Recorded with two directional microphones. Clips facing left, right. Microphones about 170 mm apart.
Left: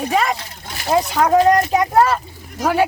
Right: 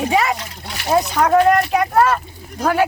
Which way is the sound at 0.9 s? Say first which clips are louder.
Even; 10° left (ahead or behind).